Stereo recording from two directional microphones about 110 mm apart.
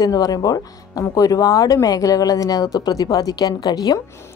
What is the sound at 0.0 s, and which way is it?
Speech, 35° left (ahead or behind).